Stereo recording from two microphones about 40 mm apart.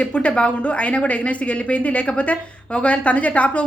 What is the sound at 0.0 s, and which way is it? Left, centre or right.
Speech, left.